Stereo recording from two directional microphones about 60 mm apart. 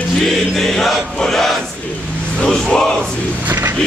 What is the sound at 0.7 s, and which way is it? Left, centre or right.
Choir, centre.